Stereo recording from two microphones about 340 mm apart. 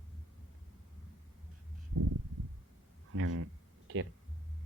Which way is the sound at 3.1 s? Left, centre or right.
Right.